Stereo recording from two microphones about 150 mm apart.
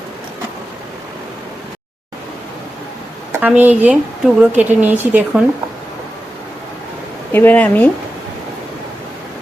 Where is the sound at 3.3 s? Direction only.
10° right (ahead or behind).